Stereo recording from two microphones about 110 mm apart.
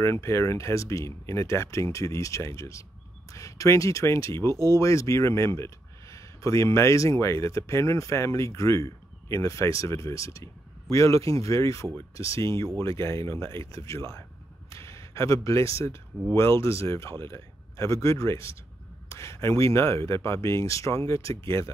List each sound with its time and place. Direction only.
0.0 s speech: 25° left (ahead or behind)
14.7 s a sound: 25° left (ahead or behind)
16.3 s speech: 25° left (ahead or behind)